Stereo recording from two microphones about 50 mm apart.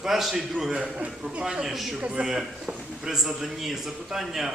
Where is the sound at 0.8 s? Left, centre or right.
Right.